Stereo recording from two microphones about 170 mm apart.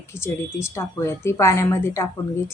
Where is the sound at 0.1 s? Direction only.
15° left (ahead or behind).